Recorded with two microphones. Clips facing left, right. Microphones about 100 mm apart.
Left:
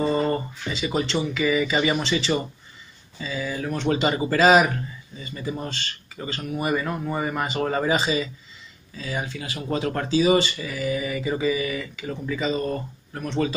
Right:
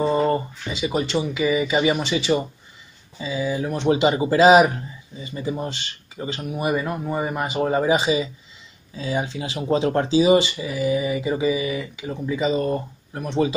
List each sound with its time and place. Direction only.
0.0 s speech: 10° right (ahead or behind)